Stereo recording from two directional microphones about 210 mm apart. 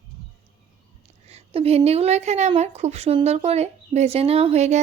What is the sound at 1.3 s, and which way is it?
A woman's voice, 30° right (ahead or behind).